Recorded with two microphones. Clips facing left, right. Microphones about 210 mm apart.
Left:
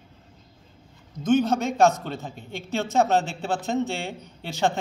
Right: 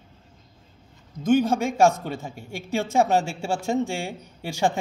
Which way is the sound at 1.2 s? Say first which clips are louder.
Right 1 dB; 10° right (ahead or behind).